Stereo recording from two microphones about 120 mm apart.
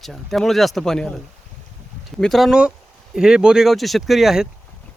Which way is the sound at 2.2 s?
Centre (ahead or behind).